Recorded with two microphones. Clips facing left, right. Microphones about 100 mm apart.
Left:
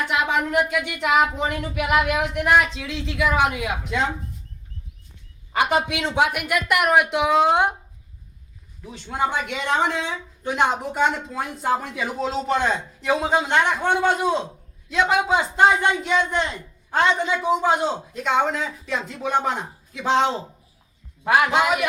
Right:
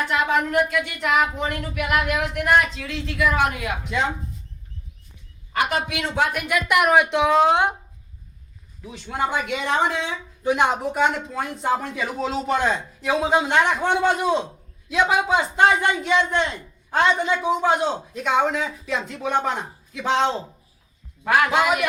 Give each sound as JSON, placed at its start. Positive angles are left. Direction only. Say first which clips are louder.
{"t": 0.3, "sound": "speech", "louder": "right 1 dB", "side_deg": 10}
{"t": 3.8, "sound": "speech", "louder": "right 1 dB", "side_deg": 0}
{"t": 5.5, "sound": "speech", "louder": "left 2 dB", "side_deg": 20}
{"t": 8.8, "sound": "a man's voice", "louder": "left 1 dB", "side_deg": 0}
{"t": 21.2, "sound": "speech", "louder": "even", "side_deg": 15}